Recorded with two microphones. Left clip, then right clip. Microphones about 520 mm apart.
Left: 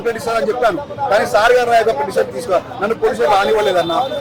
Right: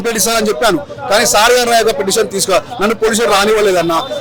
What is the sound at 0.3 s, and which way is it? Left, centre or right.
A man's voice, right.